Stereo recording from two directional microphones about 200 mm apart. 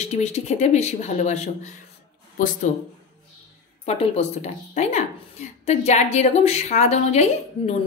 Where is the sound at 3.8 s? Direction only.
30° left (ahead or behind).